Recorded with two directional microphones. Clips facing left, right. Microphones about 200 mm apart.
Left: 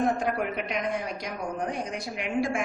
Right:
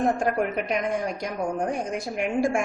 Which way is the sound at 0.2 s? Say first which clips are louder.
Right 4 dB; 50° right (ahead or behind).